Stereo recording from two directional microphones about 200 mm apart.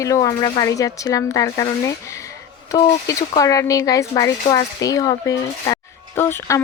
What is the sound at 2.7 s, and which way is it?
Speech, 20° left (ahead or behind).